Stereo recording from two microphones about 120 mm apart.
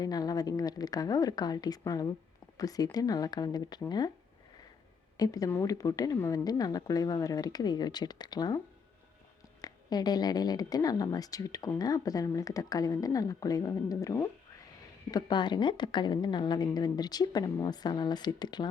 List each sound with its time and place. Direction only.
0.0 s a woman's voice: 35° left (ahead or behind)
5.1 s a woman's voice: 30° left (ahead or behind)
9.6 s a woman's voice: 30° left (ahead or behind)
15.1 s a woman's voice: 40° left (ahead or behind)